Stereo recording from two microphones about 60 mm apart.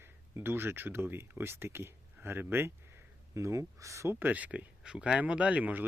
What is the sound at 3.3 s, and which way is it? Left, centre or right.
Speech, right.